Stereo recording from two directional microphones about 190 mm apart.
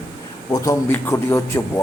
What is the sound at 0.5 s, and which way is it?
A man's voice, 15° left (ahead or behind).